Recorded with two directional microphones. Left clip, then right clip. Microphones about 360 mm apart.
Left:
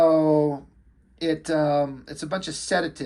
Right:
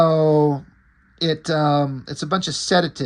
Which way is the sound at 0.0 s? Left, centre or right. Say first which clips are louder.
Right 3 dB; right.